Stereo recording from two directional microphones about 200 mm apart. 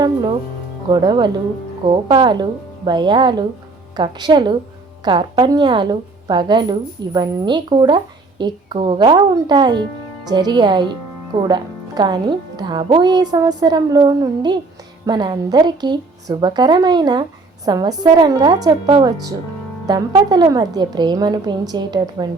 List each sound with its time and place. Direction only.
0.0 s a woman's voice: 20° right (ahead or behind)